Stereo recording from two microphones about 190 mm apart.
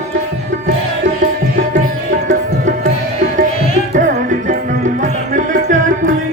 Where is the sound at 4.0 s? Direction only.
40° right (ahead or behind).